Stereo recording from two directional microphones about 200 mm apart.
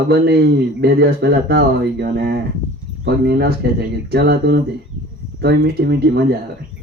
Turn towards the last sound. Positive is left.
turn(degrees=-55)  # may be behind; listen again after turning